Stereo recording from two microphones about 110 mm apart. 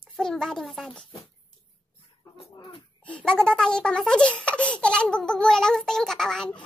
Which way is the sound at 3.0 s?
10° left (ahead or behind).